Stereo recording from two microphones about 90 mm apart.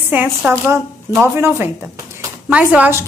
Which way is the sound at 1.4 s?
30° right (ahead or behind).